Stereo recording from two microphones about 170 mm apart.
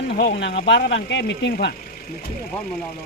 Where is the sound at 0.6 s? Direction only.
85° left.